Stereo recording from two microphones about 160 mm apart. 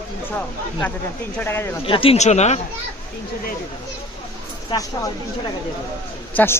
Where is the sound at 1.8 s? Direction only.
35° left (ahead or behind).